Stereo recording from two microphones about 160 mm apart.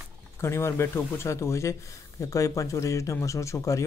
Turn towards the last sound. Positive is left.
turn(degrees=20)  # may be behind; listen again after turning